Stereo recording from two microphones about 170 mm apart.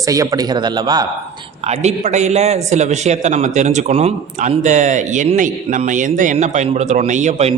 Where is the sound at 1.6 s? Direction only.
40° right (ahead or behind).